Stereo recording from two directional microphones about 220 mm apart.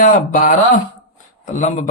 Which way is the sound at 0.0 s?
35° left (ahead or behind).